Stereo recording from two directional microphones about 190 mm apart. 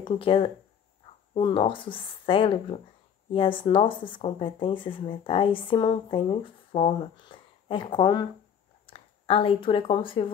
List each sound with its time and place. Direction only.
0.0 s speech: 25° left (ahead or behind)